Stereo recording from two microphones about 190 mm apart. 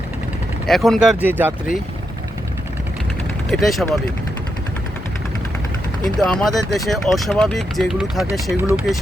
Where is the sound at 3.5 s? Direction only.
Centre (ahead or behind).